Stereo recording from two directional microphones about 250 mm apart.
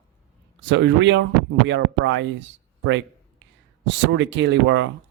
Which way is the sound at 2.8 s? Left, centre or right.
Right.